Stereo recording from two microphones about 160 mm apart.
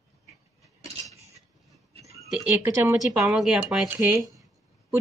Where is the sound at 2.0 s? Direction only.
20° left (ahead or behind).